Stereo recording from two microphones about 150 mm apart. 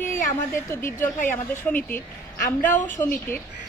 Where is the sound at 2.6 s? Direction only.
55° left (ahead or behind).